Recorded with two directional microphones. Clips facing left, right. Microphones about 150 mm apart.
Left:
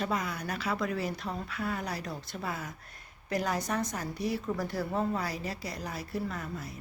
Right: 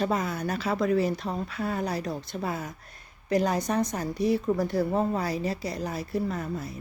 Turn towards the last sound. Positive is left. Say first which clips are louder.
# right 6 dB
turn(degrees=-25)  # may be behind; listen again after turning